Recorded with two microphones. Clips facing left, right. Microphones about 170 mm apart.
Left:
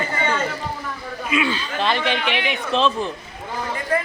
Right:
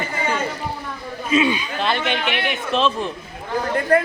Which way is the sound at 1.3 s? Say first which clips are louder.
Right 4 dB; 20° right (ahead or behind).